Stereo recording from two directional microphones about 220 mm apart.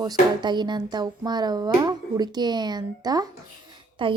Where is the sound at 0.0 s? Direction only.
20° right (ahead or behind).